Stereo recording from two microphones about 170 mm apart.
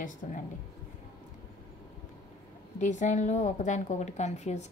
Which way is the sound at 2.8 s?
45° left (ahead or behind).